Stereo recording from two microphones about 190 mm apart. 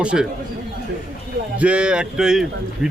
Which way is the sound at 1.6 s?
5° right (ahead or behind).